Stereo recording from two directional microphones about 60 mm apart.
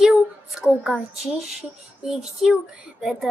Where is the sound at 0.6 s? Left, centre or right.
Centre.